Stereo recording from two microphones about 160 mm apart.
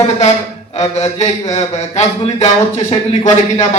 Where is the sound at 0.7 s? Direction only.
45° left (ahead or behind).